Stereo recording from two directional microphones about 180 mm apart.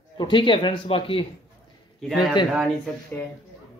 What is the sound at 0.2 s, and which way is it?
Speech, 25° left (ahead or behind).